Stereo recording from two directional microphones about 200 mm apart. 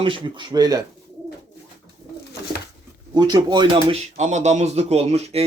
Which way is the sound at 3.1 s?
20° right (ahead or behind).